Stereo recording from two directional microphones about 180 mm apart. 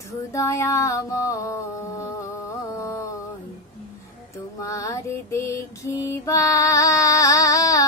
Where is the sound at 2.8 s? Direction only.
15° left (ahead or behind).